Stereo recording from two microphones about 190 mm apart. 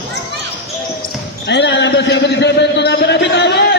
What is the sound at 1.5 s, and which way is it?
A man's voice, 65° left (ahead or behind).